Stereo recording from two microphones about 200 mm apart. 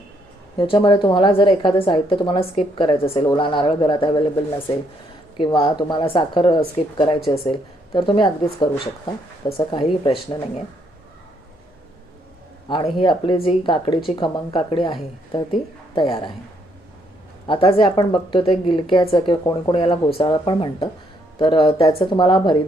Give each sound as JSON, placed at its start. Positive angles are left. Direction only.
{"t": 0.7, "sound": "a woman's voice", "side_deg": 25}
{"t": 5.4, "sound": "a woman's voice", "side_deg": 25}
{"t": 12.6, "sound": "a woman's voice", "side_deg": 25}
{"t": 16.0, "sound": "a woman's voice", "side_deg": 25}
{"t": 17.4, "sound": "a woman's voice", "side_deg": 25}